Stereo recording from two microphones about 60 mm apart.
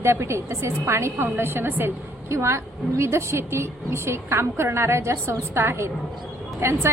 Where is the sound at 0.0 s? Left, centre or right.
Right.